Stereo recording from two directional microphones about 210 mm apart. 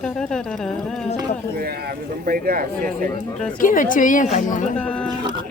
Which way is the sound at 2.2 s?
45° right (ahead or behind).